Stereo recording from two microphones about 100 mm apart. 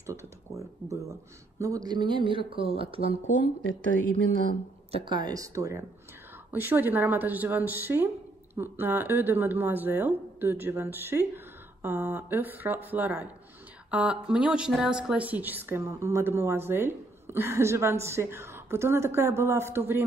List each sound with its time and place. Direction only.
0.8 s speech: 30° right (ahead or behind); by 3.2 s 80° right
5.0 s speech: 45° right (ahead or behind)
6.5 s a woman's voice: 20° right (ahead or behind)